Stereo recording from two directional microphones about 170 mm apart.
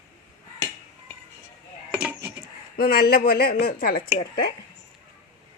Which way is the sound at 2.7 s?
60° left (ahead or behind).